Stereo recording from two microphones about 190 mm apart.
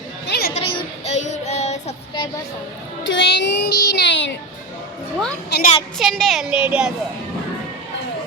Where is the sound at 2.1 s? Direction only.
25° left (ahead or behind).